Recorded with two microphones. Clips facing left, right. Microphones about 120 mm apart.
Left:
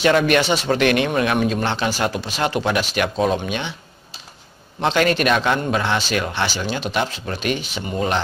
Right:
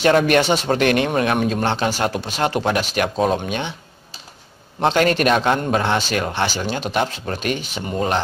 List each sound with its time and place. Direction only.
0.0 s speech: 45° right (ahead or behind)
4.7 s speech: 40° right (ahead or behind)